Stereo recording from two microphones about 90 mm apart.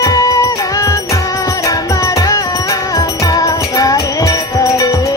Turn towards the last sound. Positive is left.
turn(degrees=40)  # may be behind; listen again after turning